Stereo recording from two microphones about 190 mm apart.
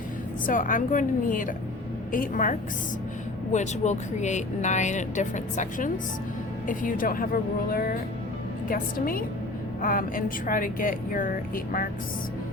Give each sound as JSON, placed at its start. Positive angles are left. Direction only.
{"t": 0.4, "sound": "speech", "side_deg": 45}